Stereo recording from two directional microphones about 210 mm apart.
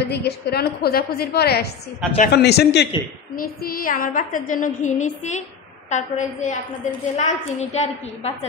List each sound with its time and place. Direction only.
0.0 s a woman's voice: 50° left (ahead or behind); by 8.5 s 30° left (ahead or behind)